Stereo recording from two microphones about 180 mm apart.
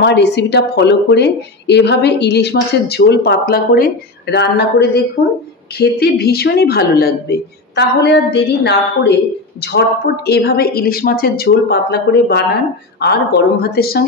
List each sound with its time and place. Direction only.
0.0 s a woman's voice: 75° left (ahead or behind)